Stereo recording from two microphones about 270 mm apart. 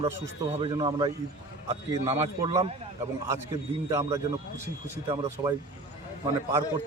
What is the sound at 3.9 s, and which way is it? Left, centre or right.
A man's voice, centre.